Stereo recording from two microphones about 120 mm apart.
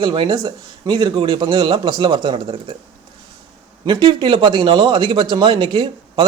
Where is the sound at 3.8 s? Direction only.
40° right (ahead or behind).